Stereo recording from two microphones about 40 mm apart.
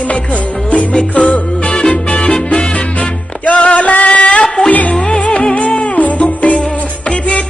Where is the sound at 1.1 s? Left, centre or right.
Left.